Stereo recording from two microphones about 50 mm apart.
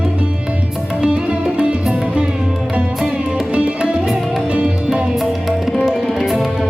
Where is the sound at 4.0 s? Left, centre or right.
Centre.